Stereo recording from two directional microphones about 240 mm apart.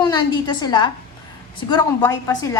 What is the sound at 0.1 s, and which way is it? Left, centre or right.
A woman's voice, centre.